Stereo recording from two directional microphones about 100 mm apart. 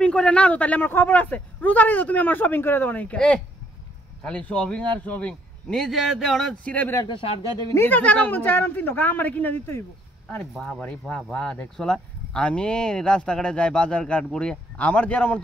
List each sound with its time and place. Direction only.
0.0 s speech: 10° left (ahead or behind)
5.9 s speech: centre (ahead or behind)
7.1 s speech: 60° left (ahead or behind)
7.7 s a man's voice: 20° left (ahead or behind)
10.8 s speech: 10° left (ahead or behind)